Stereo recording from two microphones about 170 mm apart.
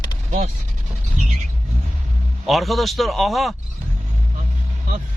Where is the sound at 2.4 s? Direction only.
Centre (ahead or behind).